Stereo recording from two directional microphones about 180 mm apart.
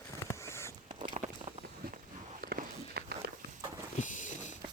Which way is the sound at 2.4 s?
55° right (ahead or behind).